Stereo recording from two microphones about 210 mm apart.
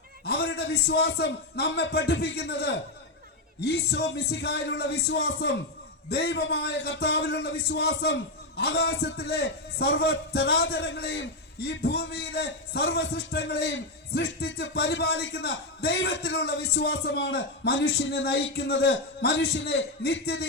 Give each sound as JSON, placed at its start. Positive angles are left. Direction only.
{"t": 0.3, "sound": "a man's voice", "side_deg": 50}